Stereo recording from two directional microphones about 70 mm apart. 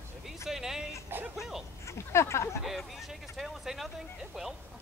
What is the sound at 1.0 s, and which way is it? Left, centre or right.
Speech, right.